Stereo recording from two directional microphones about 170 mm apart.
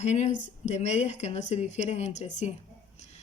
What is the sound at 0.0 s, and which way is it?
Speech, 40° left (ahead or behind).